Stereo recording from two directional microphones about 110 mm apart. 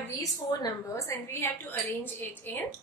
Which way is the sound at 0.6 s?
30° left (ahead or behind).